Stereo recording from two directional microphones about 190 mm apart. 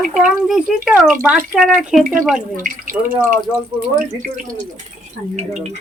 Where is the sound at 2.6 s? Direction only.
45° right (ahead or behind).